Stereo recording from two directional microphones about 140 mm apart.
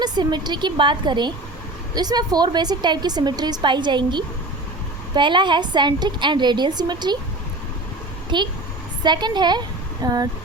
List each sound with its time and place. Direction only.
0.0 s a woman's voice: 30° right (ahead or behind)
8.3 s a woman's voice: 35° right (ahead or behind)